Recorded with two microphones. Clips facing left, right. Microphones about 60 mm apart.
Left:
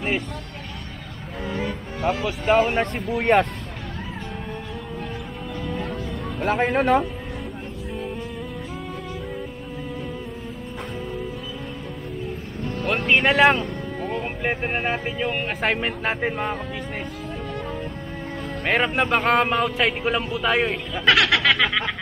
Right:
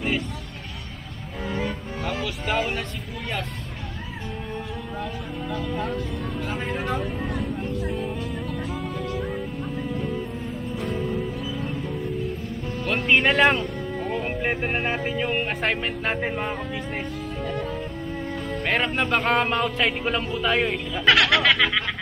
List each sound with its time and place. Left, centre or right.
2.0 s speech: left
3.1 s speech: left
6.4 s speech: left
12.8 s speech: centre
18.7 s a man's voice: centre